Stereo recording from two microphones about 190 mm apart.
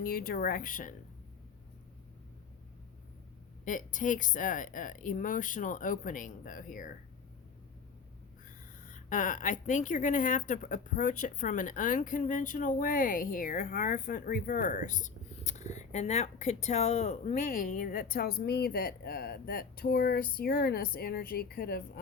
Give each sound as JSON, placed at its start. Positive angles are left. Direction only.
{"t": 0.0, "sound": "speech", "side_deg": 50}
{"t": 3.7, "sound": "speech", "side_deg": 45}
{"t": 8.4, "sound": "speech", "side_deg": 40}